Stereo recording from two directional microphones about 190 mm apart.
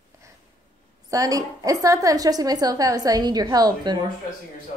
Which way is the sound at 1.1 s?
20° right (ahead or behind).